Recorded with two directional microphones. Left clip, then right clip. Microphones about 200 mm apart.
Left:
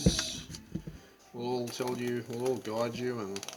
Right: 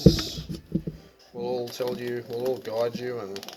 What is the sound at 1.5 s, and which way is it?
Speech, 20° left (ahead or behind).